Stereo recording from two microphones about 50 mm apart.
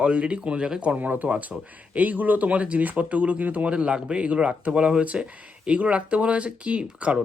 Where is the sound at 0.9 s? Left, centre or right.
Right.